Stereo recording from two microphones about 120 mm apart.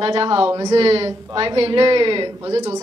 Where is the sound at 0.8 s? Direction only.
55° right (ahead or behind).